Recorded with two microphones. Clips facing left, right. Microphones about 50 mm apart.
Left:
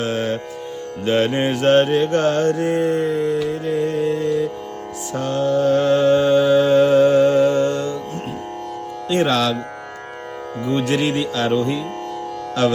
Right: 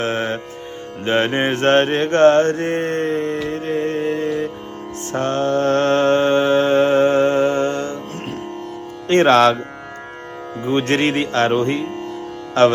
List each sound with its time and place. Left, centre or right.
0.0 s music: right
1.0 s mantra: right
9.0 s speech: right
10.8 s speech: right